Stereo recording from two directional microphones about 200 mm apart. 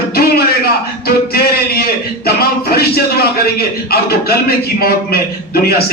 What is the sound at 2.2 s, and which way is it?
A man's voice, 50° left (ahead or behind).